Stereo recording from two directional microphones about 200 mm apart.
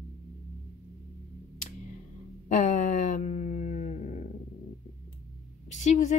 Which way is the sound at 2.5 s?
40° left (ahead or behind).